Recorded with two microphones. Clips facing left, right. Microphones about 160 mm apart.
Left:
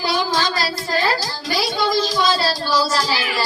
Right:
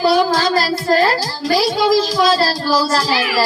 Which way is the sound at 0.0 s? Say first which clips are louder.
Right 7 dB; 45° right (ahead or behind).